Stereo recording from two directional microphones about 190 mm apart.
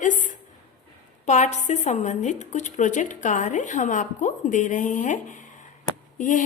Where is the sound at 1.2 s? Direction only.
40° left (ahead or behind).